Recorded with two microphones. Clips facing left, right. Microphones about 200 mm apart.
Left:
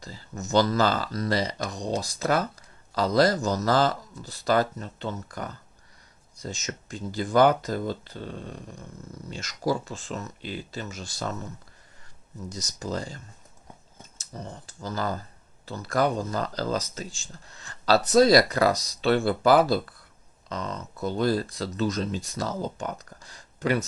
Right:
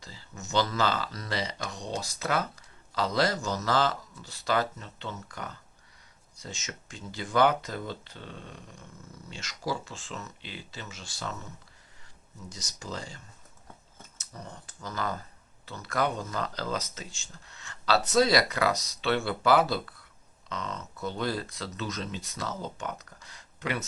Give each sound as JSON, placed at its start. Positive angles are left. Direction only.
{"t": 0.0, "sound": "speech", "side_deg": 40}
{"t": 12.5, "sound": "speech", "side_deg": 40}
{"t": 14.2, "sound": "speech", "side_deg": 30}